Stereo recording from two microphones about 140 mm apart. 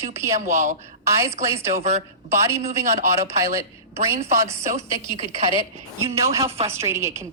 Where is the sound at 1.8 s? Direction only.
50° right (ahead or behind).